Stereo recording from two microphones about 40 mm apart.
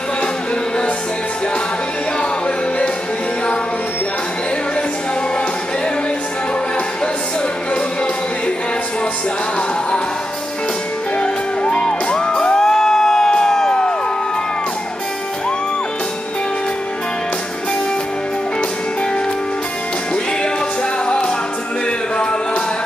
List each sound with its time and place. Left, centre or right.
7.7 s music: left
11.1 s music: left
13.3 s crowd: centre
21.0 s music: left